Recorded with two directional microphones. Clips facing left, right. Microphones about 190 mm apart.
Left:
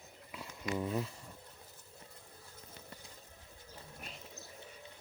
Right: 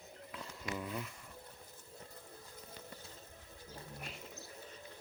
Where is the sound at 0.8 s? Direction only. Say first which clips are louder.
Left 8 dB; 30° left (ahead or behind).